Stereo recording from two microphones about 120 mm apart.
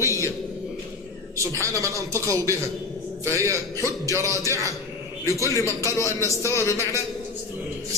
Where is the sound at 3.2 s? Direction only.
25° right (ahead or behind).